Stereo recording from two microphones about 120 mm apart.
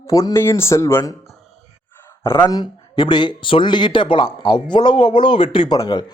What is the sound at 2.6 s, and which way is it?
Speech, 40° left (ahead or behind).